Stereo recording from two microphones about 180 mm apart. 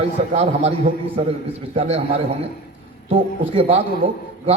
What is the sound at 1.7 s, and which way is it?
Speech, 35° right (ahead or behind).